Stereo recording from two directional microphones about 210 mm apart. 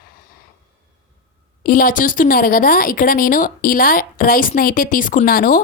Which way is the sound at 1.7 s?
40° left (ahead or behind).